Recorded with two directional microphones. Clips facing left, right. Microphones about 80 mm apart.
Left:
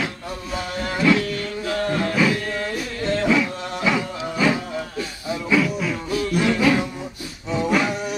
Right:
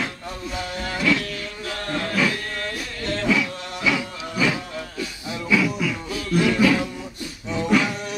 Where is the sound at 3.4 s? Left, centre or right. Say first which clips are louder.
Left 3 dB; left.